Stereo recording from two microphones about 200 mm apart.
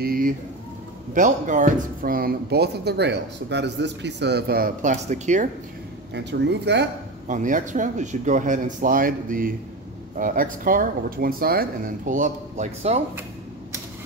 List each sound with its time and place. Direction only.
0.0 s speech: 45° right (ahead or behind)
6.1 s speech: 60° right (ahead or behind)
7.2 s speech: 40° right (ahead or behind)
12.1 s speech: 40° right (ahead or behind)